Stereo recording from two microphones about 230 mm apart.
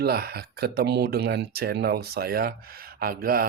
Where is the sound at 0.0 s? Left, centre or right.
Right.